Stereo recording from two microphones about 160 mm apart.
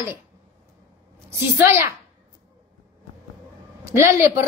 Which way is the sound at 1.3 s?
15° right (ahead or behind).